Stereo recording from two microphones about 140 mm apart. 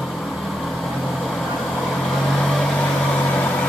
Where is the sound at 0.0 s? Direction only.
Centre (ahead or behind).